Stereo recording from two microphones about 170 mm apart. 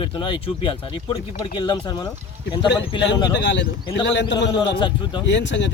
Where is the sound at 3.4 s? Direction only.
90° left.